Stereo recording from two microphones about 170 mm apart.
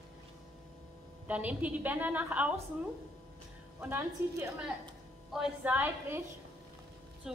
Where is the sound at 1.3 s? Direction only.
10° right (ahead or behind).